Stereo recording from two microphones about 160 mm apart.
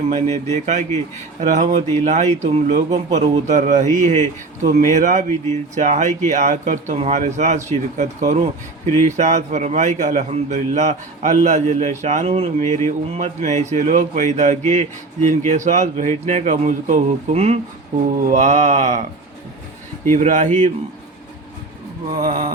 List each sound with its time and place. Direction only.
0.1 s a man's voice: 45° right (ahead or behind)
20.1 s a man's voice: 50° right (ahead or behind)
22.1 s a man's voice: 45° right (ahead or behind)